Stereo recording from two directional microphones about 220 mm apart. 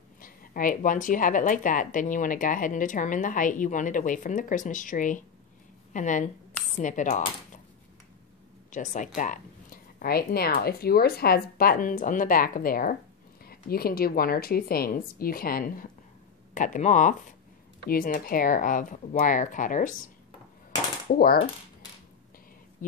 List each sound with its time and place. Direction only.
0.2 s a woman's voice: 40° left (ahead or behind)
8.7 s a woman's voice: 35° left (ahead or behind)
21.2 s a woman's voice: 45° left (ahead or behind)
22.8 s a sound: 35° left (ahead or behind)